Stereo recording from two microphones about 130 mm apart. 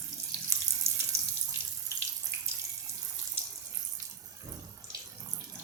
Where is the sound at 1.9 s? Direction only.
20° right (ahead or behind).